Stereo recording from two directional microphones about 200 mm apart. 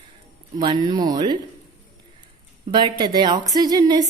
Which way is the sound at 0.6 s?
20° right (ahead or behind).